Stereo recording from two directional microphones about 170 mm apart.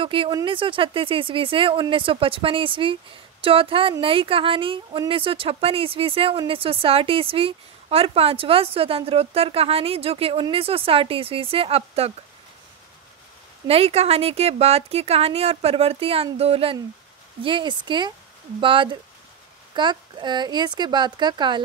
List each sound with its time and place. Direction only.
0.0 s speech: 30° right (ahead or behind)
13.7 s speech: 35° right (ahead or behind)